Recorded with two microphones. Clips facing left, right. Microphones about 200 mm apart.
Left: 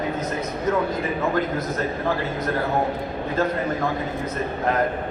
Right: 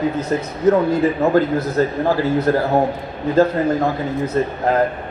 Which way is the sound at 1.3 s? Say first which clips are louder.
Right 8 dB; 30° right (ahead or behind).